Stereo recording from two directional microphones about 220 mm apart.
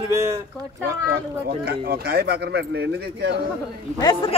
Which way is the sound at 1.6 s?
45° right (ahead or behind).